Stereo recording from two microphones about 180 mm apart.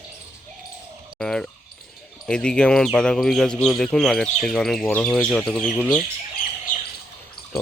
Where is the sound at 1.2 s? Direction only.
5° left (ahead or behind).